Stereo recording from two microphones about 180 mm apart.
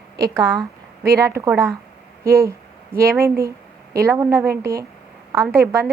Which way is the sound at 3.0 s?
15° right (ahead or behind).